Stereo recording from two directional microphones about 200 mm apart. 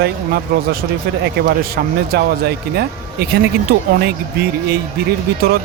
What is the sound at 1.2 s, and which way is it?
A man's voice, 55° right (ahead or behind).